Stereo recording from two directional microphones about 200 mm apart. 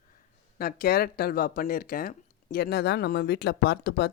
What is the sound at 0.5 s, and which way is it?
Speech, 50° left (ahead or behind).